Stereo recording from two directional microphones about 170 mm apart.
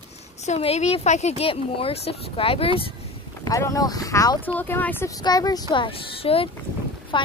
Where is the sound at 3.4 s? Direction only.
20° left (ahead or behind).